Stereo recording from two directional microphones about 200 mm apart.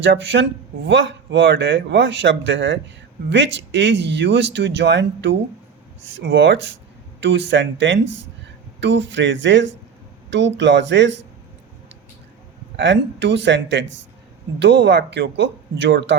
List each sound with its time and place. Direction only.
0.0 s speech: 65° right (ahead or behind)
12.7 s speech: 60° right (ahead or behind)